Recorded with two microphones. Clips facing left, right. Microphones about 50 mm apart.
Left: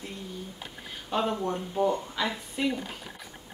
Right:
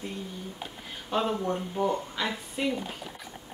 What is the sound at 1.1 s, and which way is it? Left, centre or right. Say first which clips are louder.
A woman's voice: even; centre.